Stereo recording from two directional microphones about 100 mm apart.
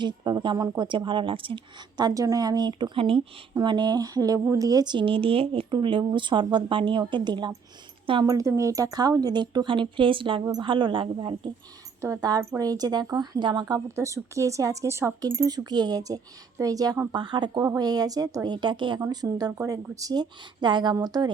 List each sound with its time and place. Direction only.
0.0 s speech: 50° right (ahead or behind)
3.5 s speech: 45° right (ahead or behind); by 5.6 s 65° right (ahead or behind)
5.7 s speech: 50° right (ahead or behind)
8.2 s speech: 35° right (ahead or behind); by 11.5 s 55° right (ahead or behind)
12.0 s speech: 30° right (ahead or behind)
13.8 s speech: 30° right (ahead or behind)
17.1 s speech: 50° right (ahead or behind)
17.6 s speech: 35° right (ahead or behind); by 18.9 s 50° right (ahead or behind)
18.9 s speech: 40° right (ahead or behind)